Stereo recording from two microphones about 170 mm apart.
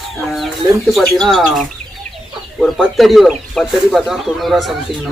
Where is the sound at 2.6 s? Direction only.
Centre (ahead or behind).